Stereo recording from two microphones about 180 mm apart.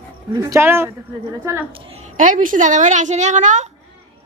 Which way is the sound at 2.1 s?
45° right (ahead or behind).